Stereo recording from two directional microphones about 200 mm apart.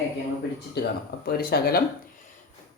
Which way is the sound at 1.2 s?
50° left (ahead or behind).